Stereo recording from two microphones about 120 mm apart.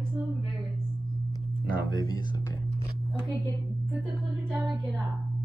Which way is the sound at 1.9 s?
35° left (ahead or behind).